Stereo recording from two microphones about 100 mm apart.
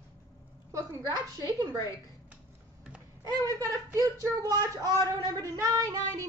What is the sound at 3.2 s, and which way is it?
Speech, 35° right (ahead or behind).